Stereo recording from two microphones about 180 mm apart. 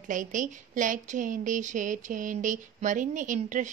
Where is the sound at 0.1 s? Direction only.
45° right (ahead or behind).